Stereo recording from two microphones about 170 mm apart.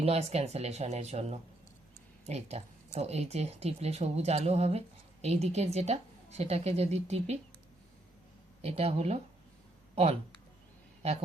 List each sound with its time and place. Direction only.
0.0 s speech: 40° right (ahead or behind)
8.6 s speech: 35° right (ahead or behind)